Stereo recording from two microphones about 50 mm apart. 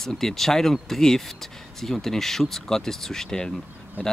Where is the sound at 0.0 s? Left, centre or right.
Centre.